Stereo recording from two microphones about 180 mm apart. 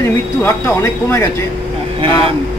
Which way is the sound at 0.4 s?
10° left (ahead or behind).